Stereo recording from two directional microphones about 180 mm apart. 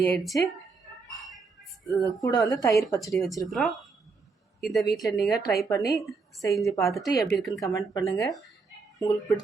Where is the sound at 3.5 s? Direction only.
Centre (ahead or behind).